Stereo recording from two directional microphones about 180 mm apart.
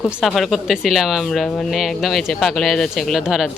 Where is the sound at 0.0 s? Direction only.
Centre (ahead or behind).